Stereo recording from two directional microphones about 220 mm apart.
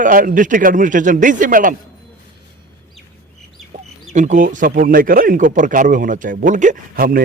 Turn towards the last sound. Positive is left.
turn(degrees=-40)  # may be behind; listen again after turning